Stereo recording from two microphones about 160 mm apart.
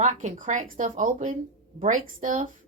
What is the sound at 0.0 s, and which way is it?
Speech, 50° right (ahead or behind).